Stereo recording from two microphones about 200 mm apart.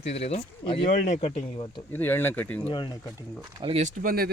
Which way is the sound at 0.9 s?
40° left (ahead or behind).